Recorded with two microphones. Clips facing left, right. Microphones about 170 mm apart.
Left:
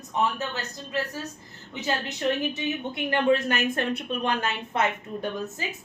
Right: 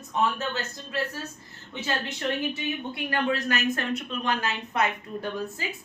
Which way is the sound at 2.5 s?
20° left (ahead or behind).